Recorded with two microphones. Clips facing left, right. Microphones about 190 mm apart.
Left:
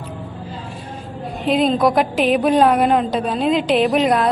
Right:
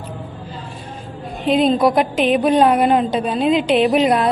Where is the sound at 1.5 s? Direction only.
Centre (ahead or behind).